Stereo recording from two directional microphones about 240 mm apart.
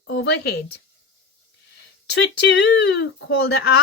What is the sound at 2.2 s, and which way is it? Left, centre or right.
A woman's voice, left.